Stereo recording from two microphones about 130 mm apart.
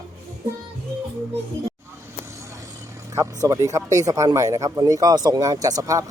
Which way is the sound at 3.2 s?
25° right (ahead or behind).